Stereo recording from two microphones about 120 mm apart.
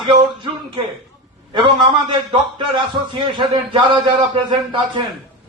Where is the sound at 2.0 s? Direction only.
40° right (ahead or behind).